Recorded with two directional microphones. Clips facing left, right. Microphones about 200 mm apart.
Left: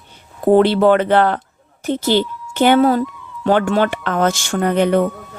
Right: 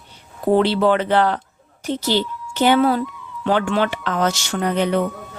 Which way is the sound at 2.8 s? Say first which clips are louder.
Left 3 dB; 40° left (ahead or behind).